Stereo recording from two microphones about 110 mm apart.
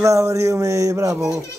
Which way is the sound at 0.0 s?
30° right (ahead or behind).